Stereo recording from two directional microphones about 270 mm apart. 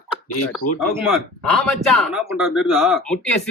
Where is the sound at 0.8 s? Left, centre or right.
Centre.